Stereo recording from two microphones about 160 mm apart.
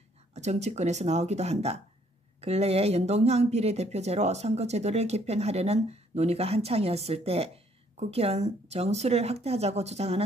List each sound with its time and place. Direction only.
0.3 s speech: 45° right (ahead or behind)